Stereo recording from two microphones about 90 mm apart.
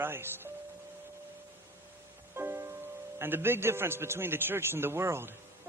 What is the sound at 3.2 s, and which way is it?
A man's voice, 25° right (ahead or behind).